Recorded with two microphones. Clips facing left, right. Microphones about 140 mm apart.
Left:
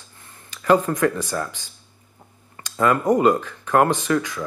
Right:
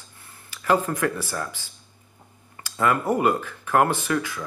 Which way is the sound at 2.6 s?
30° left (ahead or behind).